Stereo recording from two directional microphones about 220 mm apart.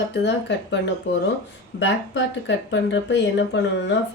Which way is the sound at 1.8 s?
55° left (ahead or behind).